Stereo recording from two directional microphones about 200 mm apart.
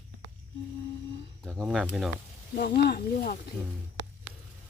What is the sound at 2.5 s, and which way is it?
Speech, 50° left (ahead or behind).